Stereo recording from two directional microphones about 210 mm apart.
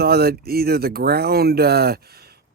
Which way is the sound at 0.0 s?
50° right (ahead or behind).